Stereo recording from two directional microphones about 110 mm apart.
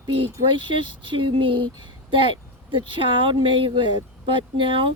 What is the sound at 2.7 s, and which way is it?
Speech, 50° right (ahead or behind).